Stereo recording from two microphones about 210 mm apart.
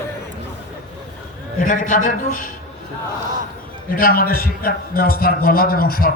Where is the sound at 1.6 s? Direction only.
40° left (ahead or behind).